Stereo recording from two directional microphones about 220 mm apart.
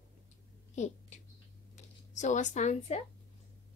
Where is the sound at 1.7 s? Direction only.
35° left (ahead or behind).